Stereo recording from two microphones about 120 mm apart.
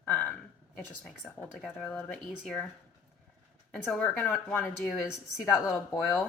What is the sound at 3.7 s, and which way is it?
Speech, 10° left (ahead or behind).